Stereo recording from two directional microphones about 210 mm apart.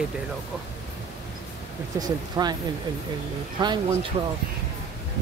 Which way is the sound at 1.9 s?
20° right (ahead or behind).